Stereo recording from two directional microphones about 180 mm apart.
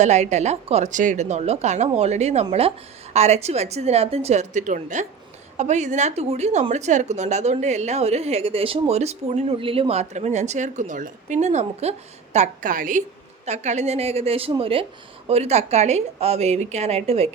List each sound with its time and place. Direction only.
0.0 s a woman's voice: 40° right (ahead or behind)